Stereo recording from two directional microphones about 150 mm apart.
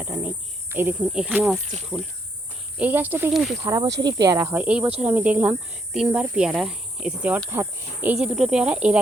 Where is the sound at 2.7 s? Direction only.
10° right (ahead or behind).